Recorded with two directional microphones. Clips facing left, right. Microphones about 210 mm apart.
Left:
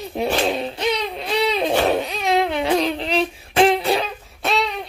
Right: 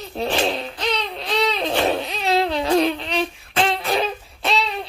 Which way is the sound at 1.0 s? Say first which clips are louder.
Left 1 dB; 10° left (ahead or behind).